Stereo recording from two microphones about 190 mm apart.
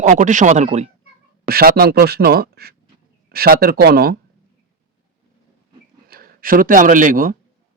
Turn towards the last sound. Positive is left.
turn(degrees=-45)  # may be behind; listen again after turning